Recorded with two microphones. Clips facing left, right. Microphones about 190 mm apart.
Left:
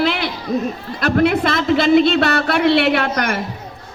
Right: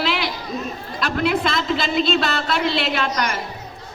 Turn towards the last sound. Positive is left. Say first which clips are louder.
# left 4 dB
turn(degrees=55)  # may be behind; listen again after turning